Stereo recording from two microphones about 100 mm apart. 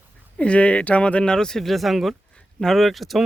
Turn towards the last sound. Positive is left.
turn(degrees=0)  # may be behind; listen again after turning